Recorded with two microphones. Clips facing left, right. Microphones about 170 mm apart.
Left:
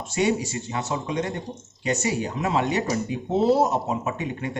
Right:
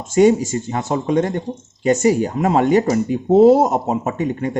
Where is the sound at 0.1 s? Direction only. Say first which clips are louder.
Right 10 dB; 45° right (ahead or behind).